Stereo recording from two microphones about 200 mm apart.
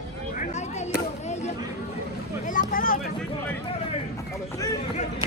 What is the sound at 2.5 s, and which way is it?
Vehicle, 45° left (ahead or behind).